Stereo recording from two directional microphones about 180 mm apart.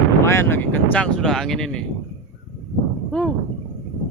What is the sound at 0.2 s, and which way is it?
Speech, 15° left (ahead or behind).